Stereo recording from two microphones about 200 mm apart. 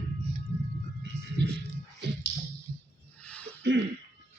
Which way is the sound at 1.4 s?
60° right (ahead or behind).